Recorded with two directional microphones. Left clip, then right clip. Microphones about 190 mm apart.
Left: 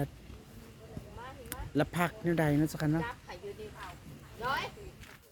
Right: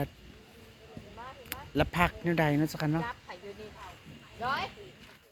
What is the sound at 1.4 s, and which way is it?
Speech, 10° left (ahead or behind).